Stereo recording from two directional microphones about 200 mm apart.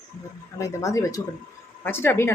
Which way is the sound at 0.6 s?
15° left (ahead or behind).